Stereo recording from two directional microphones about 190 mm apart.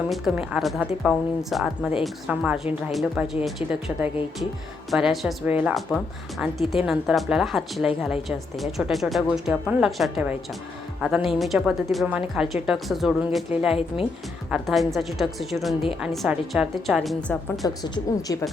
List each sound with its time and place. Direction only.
0.1 s a woman's voice: 5° right (ahead or behind)
13.7 s a woman's voice: 30° left (ahead or behind)
14.5 s speech: centre (ahead or behind)
17.8 s a woman's voice: 25° left (ahead or behind)